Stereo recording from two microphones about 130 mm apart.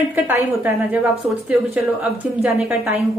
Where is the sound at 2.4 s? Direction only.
10° right (ahead or behind).